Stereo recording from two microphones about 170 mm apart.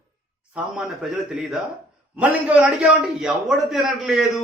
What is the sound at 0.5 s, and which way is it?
A man's voice, 5° right (ahead or behind).